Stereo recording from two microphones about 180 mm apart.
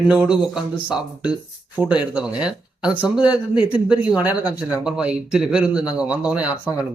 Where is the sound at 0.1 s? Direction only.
5° right (ahead or behind).